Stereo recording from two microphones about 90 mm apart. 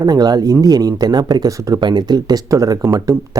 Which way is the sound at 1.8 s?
55° right (ahead or behind).